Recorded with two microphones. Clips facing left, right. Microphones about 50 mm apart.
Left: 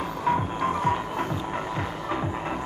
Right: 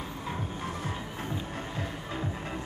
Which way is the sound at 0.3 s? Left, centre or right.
Left.